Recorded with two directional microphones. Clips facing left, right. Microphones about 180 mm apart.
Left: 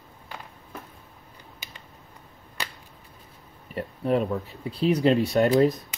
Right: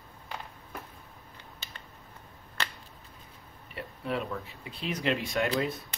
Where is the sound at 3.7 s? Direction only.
45° left (ahead or behind).